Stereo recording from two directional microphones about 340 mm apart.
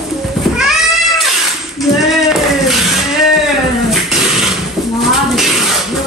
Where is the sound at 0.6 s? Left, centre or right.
Centre.